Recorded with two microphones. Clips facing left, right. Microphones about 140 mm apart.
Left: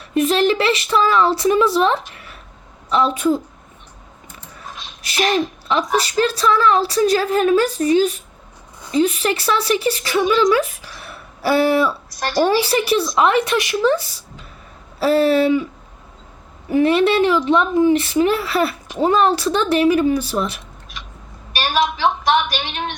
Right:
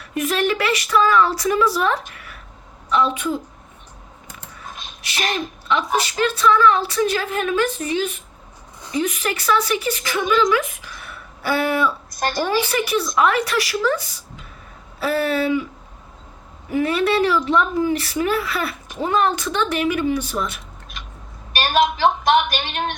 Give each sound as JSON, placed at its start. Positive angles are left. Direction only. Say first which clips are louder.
{"t": 0.1, "sound": "speech", "louder": "left 5 dB", "side_deg": 30}
{"t": 2.9, "sound": "a woman's voice", "louder": "left 3 dB", "side_deg": 35}
{"t": 5.6, "sound": "a woman's voice", "louder": "left 2 dB", "side_deg": 35}
{"t": 10.5, "sound": "a sound", "louder": "left 3 dB", "side_deg": 35}
{"t": 12.1, "sound": "a sound", "louder": "right 1 dB", "side_deg": -50}
{"t": 12.5, "sound": "a woman's voice", "louder": "left 4 dB", "side_deg": 30}
{"t": 16.7, "sound": "a woman's voice", "louder": "left 4 dB", "side_deg": 25}
{"t": 21.5, "sound": "a woman's voice", "louder": "right 1 dB", "side_deg": -45}